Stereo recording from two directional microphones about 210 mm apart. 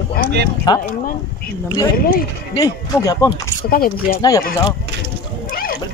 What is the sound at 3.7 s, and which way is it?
Speech, 45° left (ahead or behind).